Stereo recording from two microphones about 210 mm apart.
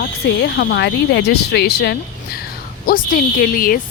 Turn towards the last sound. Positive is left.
turn(degrees=45)  # may be behind; listen again after turning